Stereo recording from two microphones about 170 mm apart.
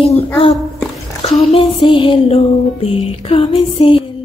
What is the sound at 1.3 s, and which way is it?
Music, 30° left (ahead or behind).